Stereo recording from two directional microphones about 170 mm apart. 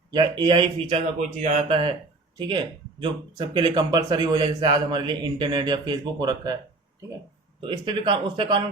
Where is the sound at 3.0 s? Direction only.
30° right (ahead or behind).